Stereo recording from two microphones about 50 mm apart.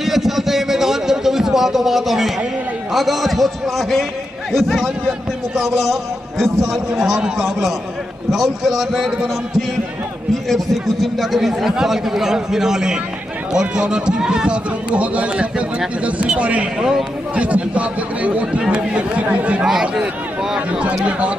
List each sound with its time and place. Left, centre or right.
0.0 s a sound: centre
2.9 s a man's voice: centre
10.5 s speech: centre; by 19.6 s right
19.6 s speech: centre